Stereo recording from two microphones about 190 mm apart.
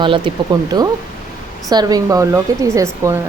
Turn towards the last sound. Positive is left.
turn(degrees=-15)  # may be behind; listen again after turning